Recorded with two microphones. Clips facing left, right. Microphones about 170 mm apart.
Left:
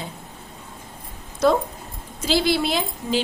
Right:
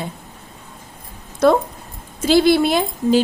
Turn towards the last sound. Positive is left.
turn(degrees=-50)  # may be behind; listen again after turning